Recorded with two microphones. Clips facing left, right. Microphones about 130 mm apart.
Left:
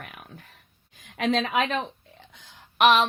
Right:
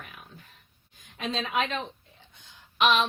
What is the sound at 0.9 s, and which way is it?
Speech, 90° left.